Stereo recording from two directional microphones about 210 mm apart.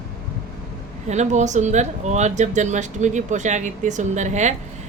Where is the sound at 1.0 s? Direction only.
35° right (ahead or behind).